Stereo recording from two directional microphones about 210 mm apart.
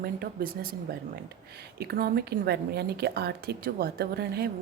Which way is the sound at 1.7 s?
45° right (ahead or behind).